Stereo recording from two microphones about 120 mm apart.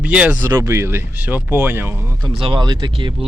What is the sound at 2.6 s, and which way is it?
Speech, 40° right (ahead or behind).